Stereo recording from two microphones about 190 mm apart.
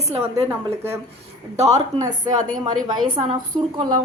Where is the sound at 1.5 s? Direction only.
35° right (ahead or behind).